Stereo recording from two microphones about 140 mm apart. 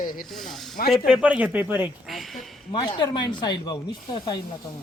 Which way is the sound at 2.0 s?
Centre (ahead or behind).